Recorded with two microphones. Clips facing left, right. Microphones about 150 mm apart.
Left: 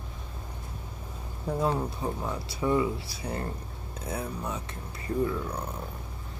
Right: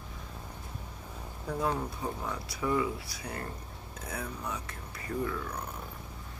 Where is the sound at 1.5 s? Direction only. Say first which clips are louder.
Left 4 dB; 25° left (ahead or behind).